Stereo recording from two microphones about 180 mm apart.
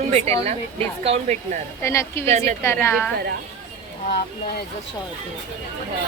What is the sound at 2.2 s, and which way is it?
Speech, 40° right (ahead or behind).